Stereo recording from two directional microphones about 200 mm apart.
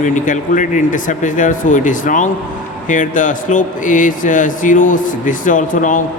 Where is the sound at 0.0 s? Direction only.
40° left (ahead or behind).